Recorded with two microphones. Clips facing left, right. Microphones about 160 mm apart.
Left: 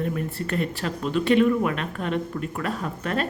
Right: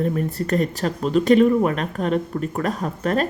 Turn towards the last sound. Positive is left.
turn(degrees=-40)  # may be behind; listen again after turning